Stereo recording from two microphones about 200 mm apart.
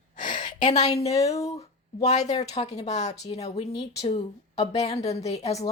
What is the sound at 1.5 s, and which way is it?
Speech, 30° left (ahead or behind).